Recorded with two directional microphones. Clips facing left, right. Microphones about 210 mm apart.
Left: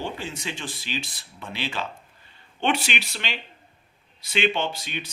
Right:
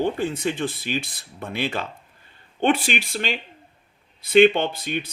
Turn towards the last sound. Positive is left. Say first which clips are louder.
# right 4 dB
turn(degrees=-55)  # may be behind; listen again after turning